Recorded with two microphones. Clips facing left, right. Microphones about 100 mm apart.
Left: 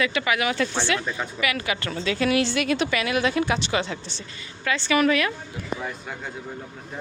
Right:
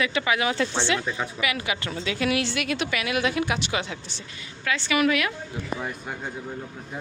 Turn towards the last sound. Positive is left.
turn(degrees=-5)  # may be behind; listen again after turning